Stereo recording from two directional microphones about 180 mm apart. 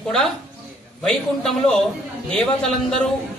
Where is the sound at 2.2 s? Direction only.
5° left (ahead or behind).